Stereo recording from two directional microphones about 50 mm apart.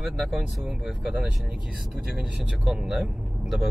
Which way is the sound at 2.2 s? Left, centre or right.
Centre.